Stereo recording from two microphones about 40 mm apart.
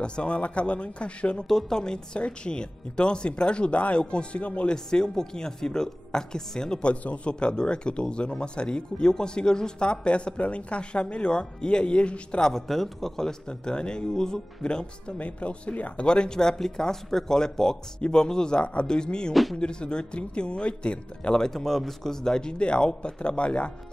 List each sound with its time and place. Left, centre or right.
0.0 s speech: left
1.5 s a man's voice: centre
2.1 s speech: left
4.7 s a man's voice: centre
6.8 s a man's voice: left
12.4 s a man's voice: centre
15.1 s a man's voice: left
16.1 s a man's voice: centre
21.4 s speech: centre; by 23.7 s left